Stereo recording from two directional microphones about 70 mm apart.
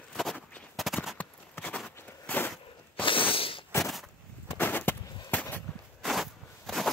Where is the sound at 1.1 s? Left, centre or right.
Centre.